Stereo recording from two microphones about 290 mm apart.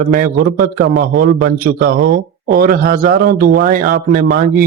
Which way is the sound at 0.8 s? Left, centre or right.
Right.